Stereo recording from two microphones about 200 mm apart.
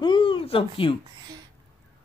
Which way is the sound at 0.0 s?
25° left (ahead or behind).